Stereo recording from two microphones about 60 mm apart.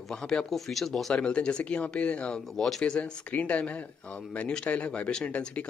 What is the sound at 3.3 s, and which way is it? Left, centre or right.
Speech, left.